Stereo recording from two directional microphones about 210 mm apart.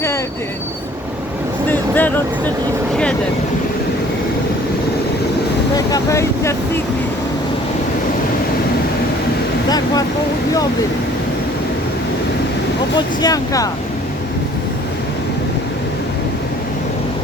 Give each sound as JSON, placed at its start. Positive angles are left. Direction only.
{"t": 1.7, "sound": "vehicle", "side_deg": 10}
{"t": 5.7, "sound": "speech", "side_deg": 15}
{"t": 9.6, "sound": "speech", "side_deg": 20}
{"t": 13.2, "sound": "speech", "side_deg": 15}